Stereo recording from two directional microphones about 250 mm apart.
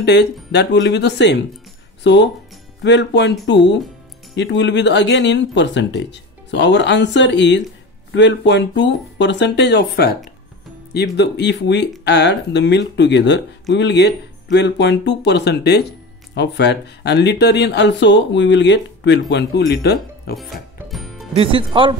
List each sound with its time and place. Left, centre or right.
0.0 s speech: left
20.9 s music: centre
21.4 s speech: right